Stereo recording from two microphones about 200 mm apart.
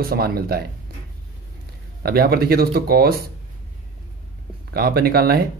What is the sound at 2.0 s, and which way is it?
Speech, 50° right (ahead or behind).